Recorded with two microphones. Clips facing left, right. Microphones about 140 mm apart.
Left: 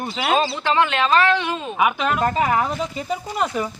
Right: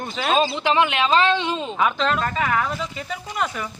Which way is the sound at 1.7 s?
15° left (ahead or behind).